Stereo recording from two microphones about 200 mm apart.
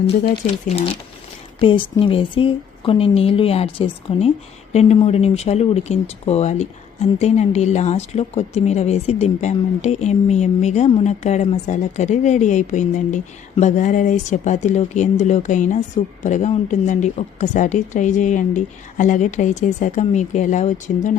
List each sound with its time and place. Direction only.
0.4 s a woman's voice: 35° left (ahead or behind)